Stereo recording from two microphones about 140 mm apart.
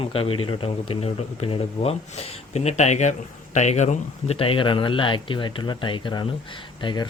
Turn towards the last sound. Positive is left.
turn(degrees=35)  # may be behind; listen again after turning